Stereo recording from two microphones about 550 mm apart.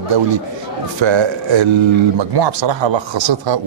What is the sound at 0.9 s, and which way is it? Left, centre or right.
Speech, right.